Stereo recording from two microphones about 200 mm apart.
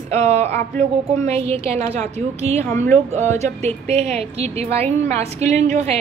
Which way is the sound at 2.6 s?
10° left (ahead or behind).